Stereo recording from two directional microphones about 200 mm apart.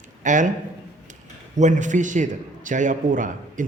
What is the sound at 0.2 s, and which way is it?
Speech, 40° right (ahead or behind).